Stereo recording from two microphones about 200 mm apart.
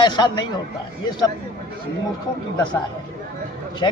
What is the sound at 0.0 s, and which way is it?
Speech, 20° left (ahead or behind).